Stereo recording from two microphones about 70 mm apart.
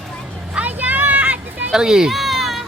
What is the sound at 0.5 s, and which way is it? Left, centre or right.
Vehicle, right.